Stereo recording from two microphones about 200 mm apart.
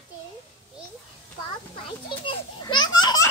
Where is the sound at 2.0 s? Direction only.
25° left (ahead or behind).